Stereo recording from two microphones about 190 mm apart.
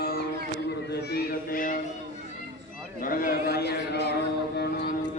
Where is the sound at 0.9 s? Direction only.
60° left (ahead or behind).